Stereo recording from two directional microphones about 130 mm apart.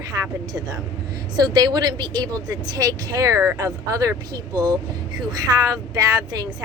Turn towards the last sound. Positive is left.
turn(degrees=-25)  # may be behind; listen again after turning